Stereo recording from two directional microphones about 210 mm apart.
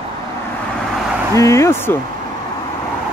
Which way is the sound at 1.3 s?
15° left (ahead or behind).